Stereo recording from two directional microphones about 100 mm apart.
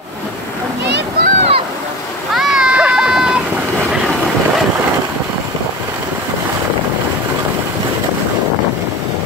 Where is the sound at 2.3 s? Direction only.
5° right (ahead or behind).